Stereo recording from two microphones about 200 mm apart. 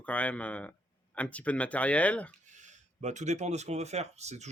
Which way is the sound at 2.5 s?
35° right (ahead or behind).